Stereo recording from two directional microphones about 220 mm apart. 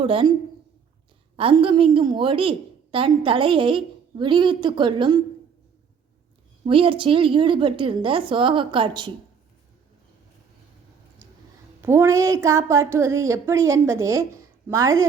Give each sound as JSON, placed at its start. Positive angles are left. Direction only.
{"t": 0.0, "sound": "a woman's voice", "side_deg": -25}
{"t": 1.4, "sound": "a woman's voice", "side_deg": -25}
{"t": 6.7, "sound": "a woman's voice", "side_deg": -25}
{"t": 11.8, "sound": "a woman's voice", "side_deg": -10}